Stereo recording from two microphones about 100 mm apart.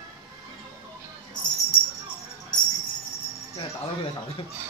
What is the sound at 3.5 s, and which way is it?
Speech, 65° left (ahead or behind).